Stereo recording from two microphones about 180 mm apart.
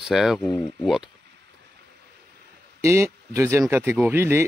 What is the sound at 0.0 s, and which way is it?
Speech, centre (ahead or behind).